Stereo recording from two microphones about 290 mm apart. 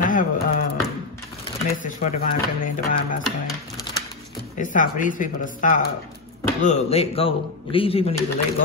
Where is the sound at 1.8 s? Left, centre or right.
Left.